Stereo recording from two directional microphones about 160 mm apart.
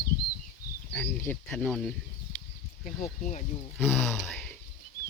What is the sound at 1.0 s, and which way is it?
Speech, 15° left (ahead or behind).